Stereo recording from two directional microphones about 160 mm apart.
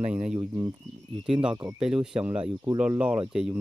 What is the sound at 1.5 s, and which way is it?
Speech, 20° right (ahead or behind).